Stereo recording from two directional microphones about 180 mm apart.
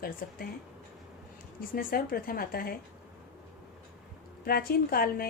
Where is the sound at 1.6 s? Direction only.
55° left (ahead or behind).